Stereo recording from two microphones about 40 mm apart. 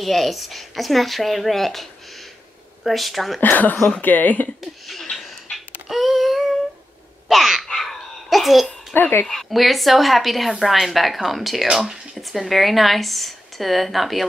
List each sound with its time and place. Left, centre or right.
0.0 s speech: centre
3.3 s speech: left
4.6 s chuckle: centre
5.9 s a sound: centre
7.2 s dog: centre
7.6 s babbling: centre
8.9 s speech: left
9.3 s speech: centre